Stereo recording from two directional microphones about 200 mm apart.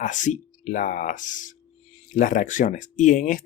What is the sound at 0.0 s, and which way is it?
Speech, 40° left (ahead or behind).